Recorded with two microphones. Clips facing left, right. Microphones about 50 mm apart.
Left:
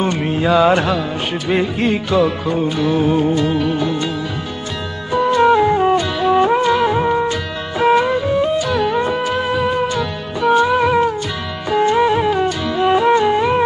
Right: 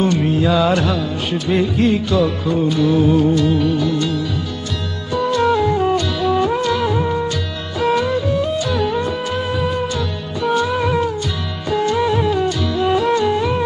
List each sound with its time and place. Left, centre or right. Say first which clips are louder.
0.0 s music: right 1 dB; left
8.5 s music: left 2 dB; centre
8.9 s music: left 3 dB; left
9.2 s music: left 3 dB; centre
10.7 s music: left 4 dB; centre
11.7 s music: left 3 dB; left